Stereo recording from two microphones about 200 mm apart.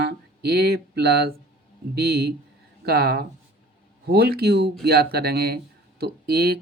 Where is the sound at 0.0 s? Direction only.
55° right (ahead or behind).